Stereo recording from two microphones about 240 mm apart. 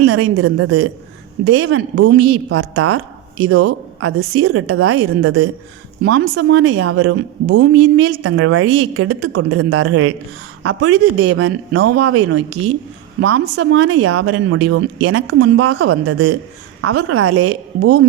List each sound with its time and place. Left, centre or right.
0.0 s a woman's voice: right
13.6 s a woman's voice: right